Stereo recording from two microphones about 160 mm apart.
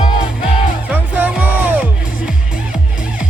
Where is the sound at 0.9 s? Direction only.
10° right (ahead or behind).